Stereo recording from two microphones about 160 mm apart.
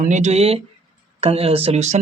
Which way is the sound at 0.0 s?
50° right (ahead or behind).